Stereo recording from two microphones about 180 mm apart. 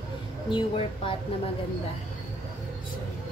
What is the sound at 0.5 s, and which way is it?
Speech, 30° left (ahead or behind).